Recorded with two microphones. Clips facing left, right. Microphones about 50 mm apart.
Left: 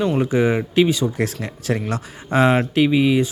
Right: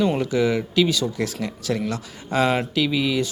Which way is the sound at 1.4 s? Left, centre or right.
Left.